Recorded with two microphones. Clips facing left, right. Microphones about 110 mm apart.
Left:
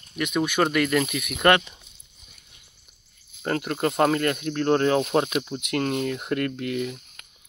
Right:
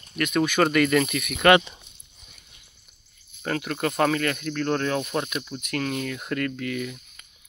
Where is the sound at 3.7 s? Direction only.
25° left (ahead or behind).